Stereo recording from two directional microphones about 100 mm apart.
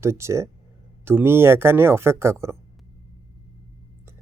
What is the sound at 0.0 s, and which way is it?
Speech, 30° right (ahead or behind).